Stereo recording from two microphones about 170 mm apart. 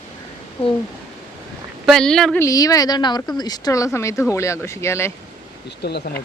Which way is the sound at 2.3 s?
20° left (ahead or behind).